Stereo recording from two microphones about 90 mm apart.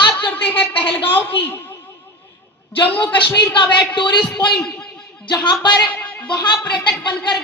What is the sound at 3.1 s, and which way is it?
Speech, 60° left (ahead or behind).